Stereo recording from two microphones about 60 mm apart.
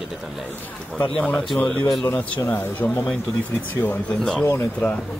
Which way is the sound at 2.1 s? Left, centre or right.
Left.